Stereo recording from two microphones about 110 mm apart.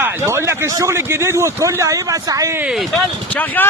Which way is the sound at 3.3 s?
15° left (ahead or behind).